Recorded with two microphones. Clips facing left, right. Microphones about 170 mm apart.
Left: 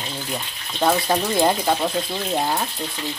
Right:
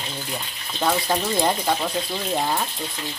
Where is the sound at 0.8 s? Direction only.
10° left (ahead or behind).